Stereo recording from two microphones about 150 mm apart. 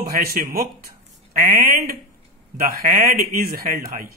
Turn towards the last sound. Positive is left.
turn(degrees=-80)